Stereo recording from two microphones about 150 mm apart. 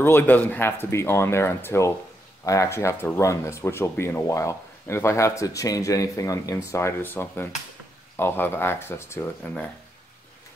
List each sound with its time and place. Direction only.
0.0 s speech: 15° left (ahead or behind)